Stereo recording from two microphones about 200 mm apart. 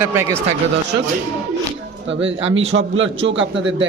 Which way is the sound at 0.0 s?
10° right (ahead or behind).